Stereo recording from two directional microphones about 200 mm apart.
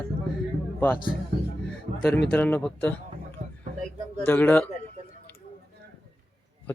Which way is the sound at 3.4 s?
35° right (ahead or behind).